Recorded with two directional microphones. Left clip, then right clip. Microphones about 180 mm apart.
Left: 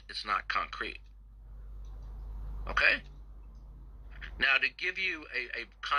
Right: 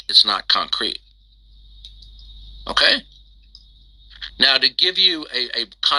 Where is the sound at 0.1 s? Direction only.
50° right (ahead or behind).